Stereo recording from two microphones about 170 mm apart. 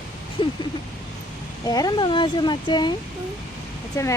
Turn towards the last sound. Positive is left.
turn(degrees=15)  # may be behind; listen again after turning